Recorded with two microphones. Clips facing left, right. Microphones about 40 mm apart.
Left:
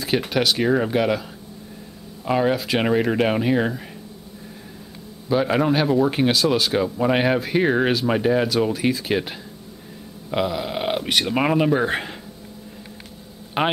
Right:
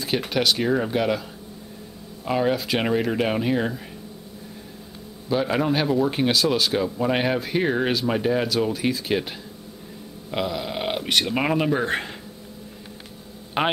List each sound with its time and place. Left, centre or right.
0.0 s speech: centre
2.2 s speech: centre
5.3 s speech: centre
10.3 s speech: centre
13.6 s speech: centre